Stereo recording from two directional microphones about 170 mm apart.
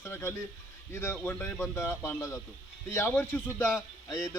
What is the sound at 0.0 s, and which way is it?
Speech, 15° left (ahead or behind).